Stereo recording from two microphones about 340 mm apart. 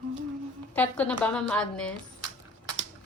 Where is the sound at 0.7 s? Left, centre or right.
Centre.